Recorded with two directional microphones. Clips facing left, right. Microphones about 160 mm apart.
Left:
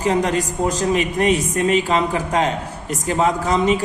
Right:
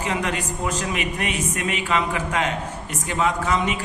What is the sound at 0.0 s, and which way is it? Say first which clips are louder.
A man's voice: left 7 dB; 35° left (ahead or behind).